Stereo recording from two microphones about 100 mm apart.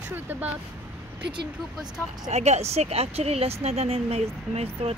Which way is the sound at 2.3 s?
90° right.